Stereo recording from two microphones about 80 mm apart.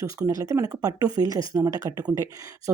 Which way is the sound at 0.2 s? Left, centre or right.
Right.